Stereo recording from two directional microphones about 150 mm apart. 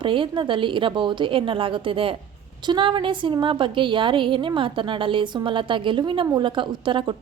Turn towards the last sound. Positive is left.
turn(degrees=-35)  # may be behind; listen again after turning